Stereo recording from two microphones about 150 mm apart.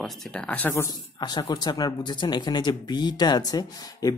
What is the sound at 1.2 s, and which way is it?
Speech, 25° left (ahead or behind).